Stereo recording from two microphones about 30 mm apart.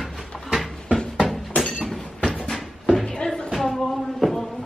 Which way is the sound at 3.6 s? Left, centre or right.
Centre.